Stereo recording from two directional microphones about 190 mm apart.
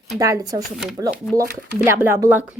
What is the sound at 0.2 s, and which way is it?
Speech, 20° right (ahead or behind).